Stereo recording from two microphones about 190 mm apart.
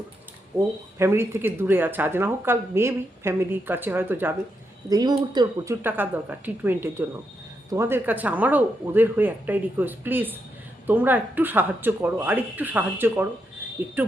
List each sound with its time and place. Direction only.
0.9 s speech: 15° right (ahead or behind)
4.9 s speech: 20° right (ahead or behind)
5.8 s speech: 10° right (ahead or behind)